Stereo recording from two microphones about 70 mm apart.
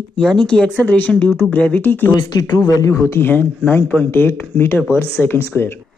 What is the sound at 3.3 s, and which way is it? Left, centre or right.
Speech, left.